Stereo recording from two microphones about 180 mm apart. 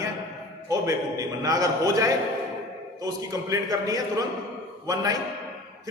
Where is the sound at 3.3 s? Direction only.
20° right (ahead or behind).